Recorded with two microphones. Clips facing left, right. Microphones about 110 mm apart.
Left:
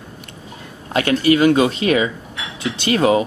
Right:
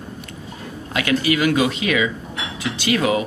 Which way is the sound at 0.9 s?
35° left (ahead or behind).